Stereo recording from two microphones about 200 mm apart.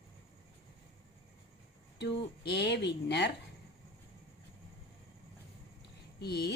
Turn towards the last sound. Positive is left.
turn(degrees=55)  # may be behind; listen again after turning